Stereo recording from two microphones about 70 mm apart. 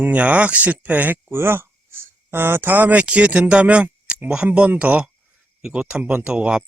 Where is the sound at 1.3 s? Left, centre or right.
Right.